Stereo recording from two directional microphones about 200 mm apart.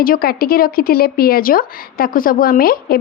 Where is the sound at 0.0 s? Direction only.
50° left (ahead or behind).